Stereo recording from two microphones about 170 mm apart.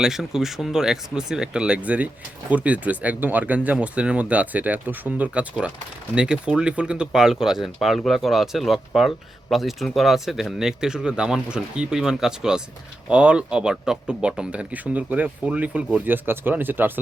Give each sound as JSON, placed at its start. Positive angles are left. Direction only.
{"t": 0.0, "sound": "speech", "side_deg": 0}